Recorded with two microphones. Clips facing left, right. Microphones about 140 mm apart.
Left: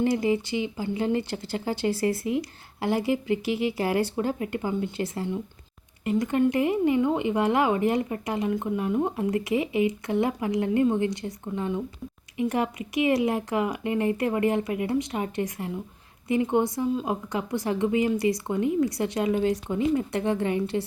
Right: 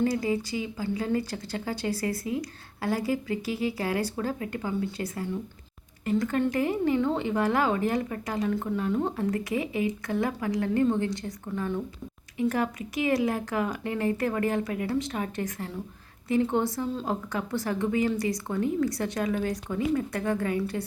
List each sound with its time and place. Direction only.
0.0 s a woman's voice: 25° left (ahead or behind)